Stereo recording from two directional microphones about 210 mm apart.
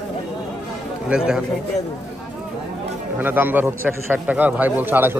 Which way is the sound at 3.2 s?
10° right (ahead or behind).